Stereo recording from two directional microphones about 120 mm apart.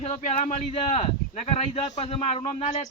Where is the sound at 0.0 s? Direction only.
75° left (ahead or behind); by 2.3 s 55° left (ahead or behind).